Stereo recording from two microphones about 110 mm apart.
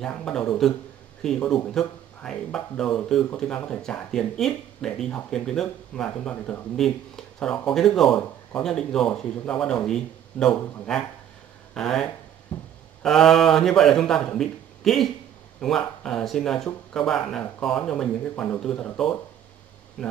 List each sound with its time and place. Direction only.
0.0 s speech: 5° left (ahead or behind)
12.5 s speech: 15° left (ahead or behind)
13.0 s speech: 5° left (ahead or behind)